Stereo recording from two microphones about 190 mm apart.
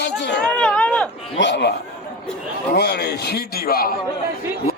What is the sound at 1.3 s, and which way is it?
A man's voice, 65° left (ahead or behind).